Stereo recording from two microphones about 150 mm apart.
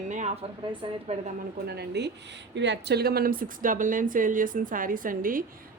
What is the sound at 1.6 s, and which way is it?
A woman's voice, 90° right.